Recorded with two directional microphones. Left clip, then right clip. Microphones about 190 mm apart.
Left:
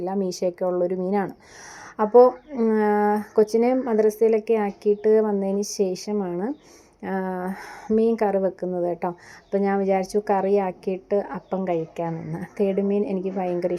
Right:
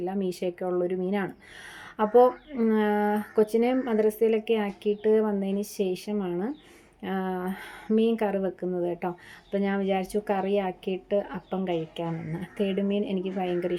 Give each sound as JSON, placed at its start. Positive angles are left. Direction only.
{"t": 0.0, "sound": "a woman's voice", "side_deg": 5}